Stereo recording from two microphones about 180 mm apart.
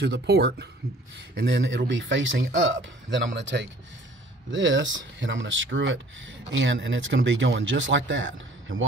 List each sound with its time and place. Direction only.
0.0 s speech: 65° right (ahead or behind)
1.4 s speech: 85° right